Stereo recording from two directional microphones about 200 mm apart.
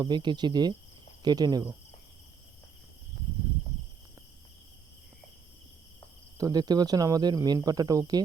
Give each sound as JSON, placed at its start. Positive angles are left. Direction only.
{"t": 0.0, "sound": "speech", "side_deg": -20}
{"t": 6.3, "sound": "speech", "side_deg": -20}